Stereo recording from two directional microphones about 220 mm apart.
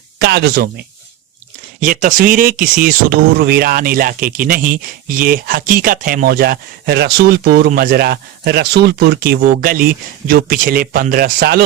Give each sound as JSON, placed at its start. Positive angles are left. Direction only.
{"t": 0.2, "sound": "speech", "side_deg": -45}
{"t": 1.8, "sound": "speech", "side_deg": -35}